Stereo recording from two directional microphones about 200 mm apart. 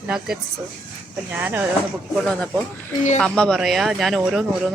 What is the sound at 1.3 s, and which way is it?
Speech, 10° right (ahead or behind).